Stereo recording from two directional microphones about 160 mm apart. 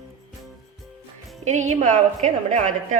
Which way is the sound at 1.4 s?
50° right (ahead or behind).